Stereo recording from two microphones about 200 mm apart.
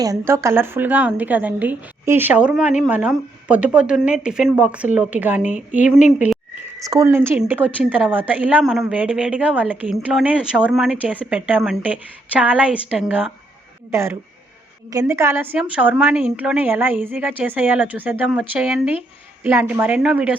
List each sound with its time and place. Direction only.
0.0 s a woman's voice: 15° right (ahead or behind)
6.0 s speech: 35° left (ahead or behind)
6.8 s a woman's voice: 15° right (ahead or behind)